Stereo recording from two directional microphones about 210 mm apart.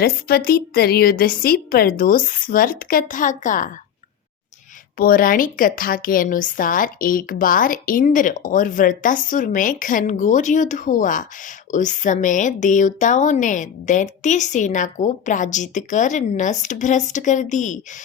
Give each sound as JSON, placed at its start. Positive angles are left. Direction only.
{"t": 0.0, "sound": "a woman's voice", "side_deg": 45}
{"t": 4.9, "sound": "a woman's voice", "side_deg": 45}